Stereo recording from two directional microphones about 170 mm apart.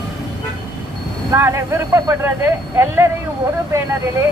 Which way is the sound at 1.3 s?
15° right (ahead or behind).